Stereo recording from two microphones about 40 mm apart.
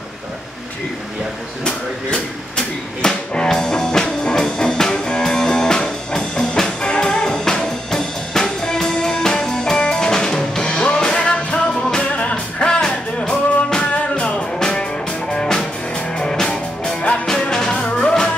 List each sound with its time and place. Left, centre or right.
1.6 s a sound: left
4.9 s music: left
13.9 s music: left